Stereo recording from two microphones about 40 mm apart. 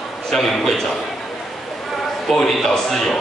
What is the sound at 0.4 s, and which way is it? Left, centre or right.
Speech, centre.